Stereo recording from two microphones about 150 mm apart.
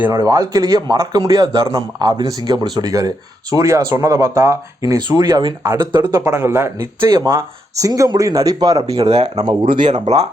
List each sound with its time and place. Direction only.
0.1 s a man's voice: 25° right (ahead or behind)
5.9 s a man's voice: 15° right (ahead or behind)
9.0 s speech: 45° right (ahead or behind)
9.4 s speech: 35° right (ahead or behind)
9.9 s speech: 45° right (ahead or behind)